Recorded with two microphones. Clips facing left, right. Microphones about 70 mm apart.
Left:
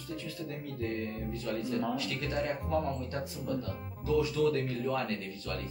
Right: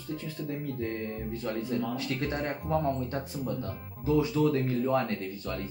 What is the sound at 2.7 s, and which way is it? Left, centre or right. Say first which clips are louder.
Speech: right 3 dB; right.